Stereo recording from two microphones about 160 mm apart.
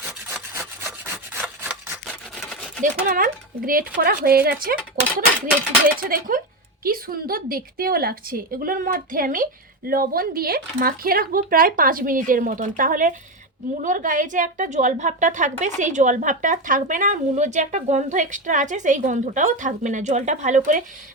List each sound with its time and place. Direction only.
0.9 s rub: 10° right (ahead or behind)
1.7 s rub: centre (ahead or behind)
2.8 s a woman's voice: 60° right (ahead or behind)
6.0 s a woman's voice: 60° right (ahead or behind)